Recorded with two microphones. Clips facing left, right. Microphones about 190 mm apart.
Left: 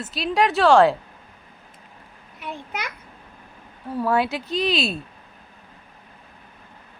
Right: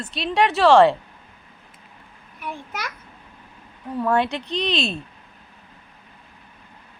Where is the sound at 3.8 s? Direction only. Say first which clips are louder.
Right 1 dB; 5° left (ahead or behind).